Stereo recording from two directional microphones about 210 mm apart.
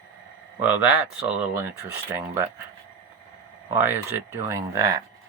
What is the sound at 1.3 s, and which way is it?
Speech, 5° right (ahead or behind).